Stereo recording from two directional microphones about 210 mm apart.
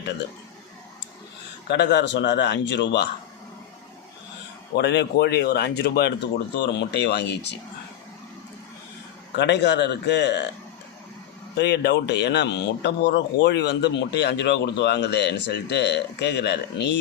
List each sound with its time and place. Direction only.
1.6 s a man's voice: 55° left (ahead or behind)
4.7 s a man's voice: 55° left (ahead or behind)
9.3 s a man's voice: 55° left (ahead or behind)
11.5 s a man's voice: 55° left (ahead or behind)